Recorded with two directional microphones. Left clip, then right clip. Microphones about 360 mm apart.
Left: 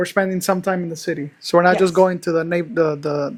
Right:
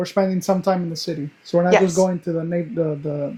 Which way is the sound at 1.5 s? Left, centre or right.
Left.